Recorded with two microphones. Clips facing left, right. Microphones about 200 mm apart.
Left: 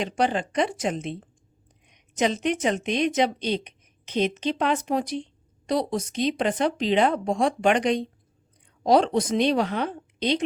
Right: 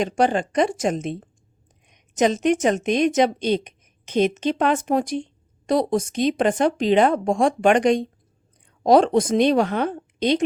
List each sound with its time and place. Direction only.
0.0 s a woman's voice: 45° right (ahead or behind)